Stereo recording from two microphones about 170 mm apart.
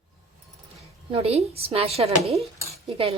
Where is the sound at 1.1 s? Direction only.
35° right (ahead or behind).